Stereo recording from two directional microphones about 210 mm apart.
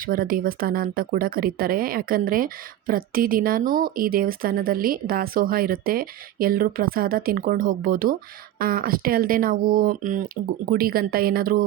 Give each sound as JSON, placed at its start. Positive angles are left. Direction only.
{"t": 0.0, "sound": "speech", "side_deg": -45}